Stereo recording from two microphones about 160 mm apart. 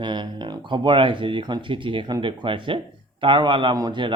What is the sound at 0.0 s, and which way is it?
Speech, 30° right (ahead or behind).